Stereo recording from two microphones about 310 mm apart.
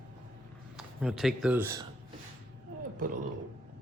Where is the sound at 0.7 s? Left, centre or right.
Centre.